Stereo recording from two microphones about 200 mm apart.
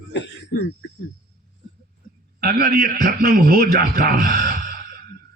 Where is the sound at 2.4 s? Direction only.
50° right (ahead or behind).